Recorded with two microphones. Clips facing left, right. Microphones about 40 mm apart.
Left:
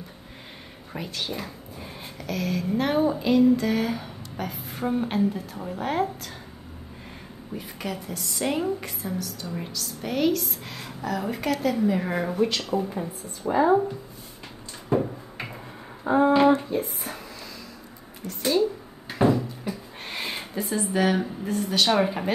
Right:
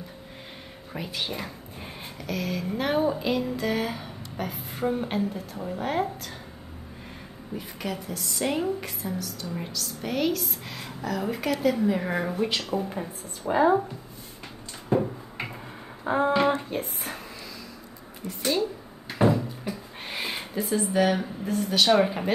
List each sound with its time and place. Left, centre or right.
1.1 s speech: centre
2.2 s speech: centre
7.5 s speech: centre
12.4 s speech: centre
13.4 s speech: centre
14.9 s a sound: centre
16.1 s speech: right
16.7 s speech: right
18.4 s speech: centre
19.1 s a sound: centre